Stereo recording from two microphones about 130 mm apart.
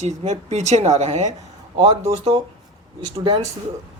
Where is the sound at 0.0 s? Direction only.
60° right (ahead or behind).